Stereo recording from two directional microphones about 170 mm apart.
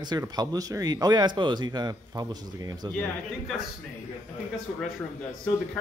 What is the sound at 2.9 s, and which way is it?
Speech, 5° left (ahead or behind).